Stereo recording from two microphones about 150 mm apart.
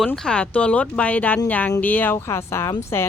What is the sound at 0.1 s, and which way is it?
Speech, 10° left (ahead or behind).